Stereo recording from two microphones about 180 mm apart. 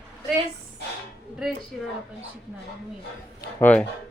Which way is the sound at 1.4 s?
Centre (ahead or behind).